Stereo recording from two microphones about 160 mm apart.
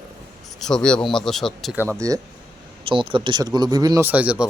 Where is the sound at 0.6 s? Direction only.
5° left (ahead or behind).